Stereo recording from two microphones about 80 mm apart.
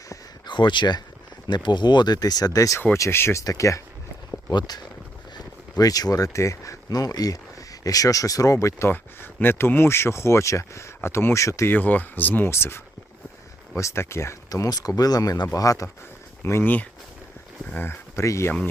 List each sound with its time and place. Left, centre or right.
0.4 s speech: left
2.9 s speech: left
4.5 s speech: left
8.9 s speech: left
11.7 s speech: left
16.4 s speech: left